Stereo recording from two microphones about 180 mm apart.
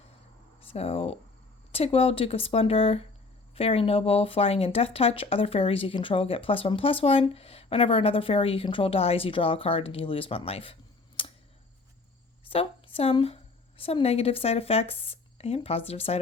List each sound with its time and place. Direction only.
0.6 s speech: 30° left (ahead or behind)
11.2 s a sound: 30° left (ahead or behind)
12.5 s a woman's voice: 30° left (ahead or behind)